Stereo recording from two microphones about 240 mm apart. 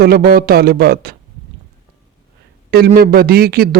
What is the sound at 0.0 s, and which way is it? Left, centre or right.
Speech, right.